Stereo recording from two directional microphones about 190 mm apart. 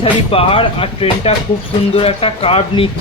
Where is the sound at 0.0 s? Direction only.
30° left (ahead or behind).